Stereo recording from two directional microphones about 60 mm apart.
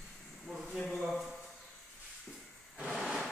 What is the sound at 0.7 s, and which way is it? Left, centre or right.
Speech, centre.